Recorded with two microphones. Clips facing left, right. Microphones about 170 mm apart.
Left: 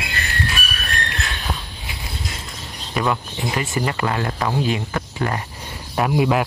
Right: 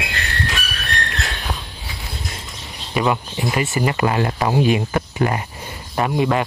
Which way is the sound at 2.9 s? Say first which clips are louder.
Right 2 dB; 5° right (ahead or behind).